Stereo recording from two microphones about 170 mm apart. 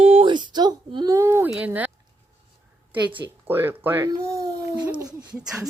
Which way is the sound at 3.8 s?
15° right (ahead or behind).